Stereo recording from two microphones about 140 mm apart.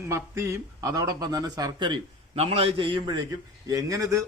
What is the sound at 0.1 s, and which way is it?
A man's voice, 20° right (ahead or behind).